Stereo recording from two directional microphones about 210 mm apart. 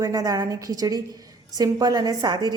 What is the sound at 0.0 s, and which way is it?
A woman's voice, 15° right (ahead or behind).